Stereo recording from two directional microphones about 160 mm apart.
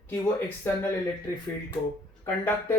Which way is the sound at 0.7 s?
15° left (ahead or behind).